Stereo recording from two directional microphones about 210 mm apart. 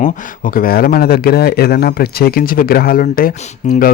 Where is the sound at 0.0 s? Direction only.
40° left (ahead or behind).